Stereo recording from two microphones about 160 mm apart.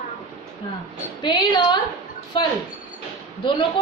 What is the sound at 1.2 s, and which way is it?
Speech, 25° left (ahead or behind).